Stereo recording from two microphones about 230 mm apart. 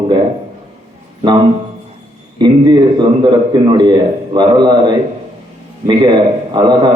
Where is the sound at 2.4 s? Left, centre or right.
Centre.